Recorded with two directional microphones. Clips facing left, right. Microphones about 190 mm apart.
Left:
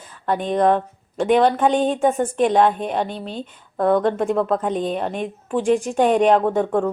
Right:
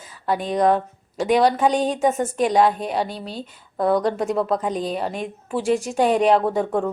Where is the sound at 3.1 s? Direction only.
40° right (ahead or behind).